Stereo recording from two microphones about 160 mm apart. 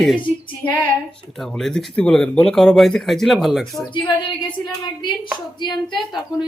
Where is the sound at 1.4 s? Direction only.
Centre (ahead or behind).